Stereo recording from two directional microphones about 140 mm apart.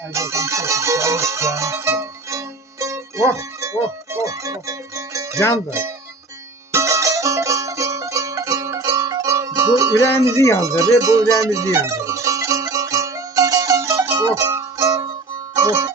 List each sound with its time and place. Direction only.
0.1 s music: 20° right (ahead or behind)
6.7 s music: 20° right (ahead or behind)
10.1 s speech: 20° left (ahead or behind)
10.6 s speech: 25° right (ahead or behind)
11.4 s zither: 25° right (ahead or behind)
15.5 s music: 25° right (ahead or behind)